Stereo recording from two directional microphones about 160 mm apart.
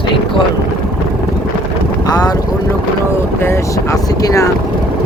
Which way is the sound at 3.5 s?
20° left (ahead or behind).